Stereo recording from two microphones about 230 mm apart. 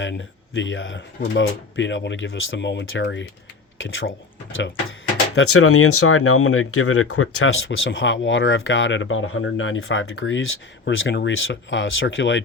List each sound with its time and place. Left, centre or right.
0.0 s speech: left